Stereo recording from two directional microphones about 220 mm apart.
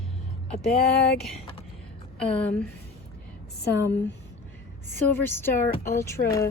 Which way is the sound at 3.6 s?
50° left (ahead or behind).